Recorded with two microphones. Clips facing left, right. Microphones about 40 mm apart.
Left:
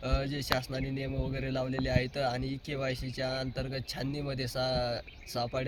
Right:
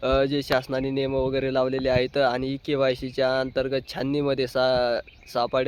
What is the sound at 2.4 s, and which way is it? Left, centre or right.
Speech, right.